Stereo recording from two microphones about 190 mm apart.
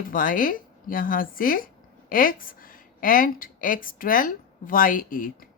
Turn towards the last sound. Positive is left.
turn(degrees=45)  # may be behind; listen again after turning